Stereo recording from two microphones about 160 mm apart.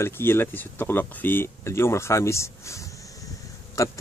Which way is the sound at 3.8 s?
20° left (ahead or behind).